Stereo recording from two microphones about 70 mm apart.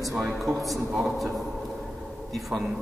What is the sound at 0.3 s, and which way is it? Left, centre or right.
A man's voice, centre.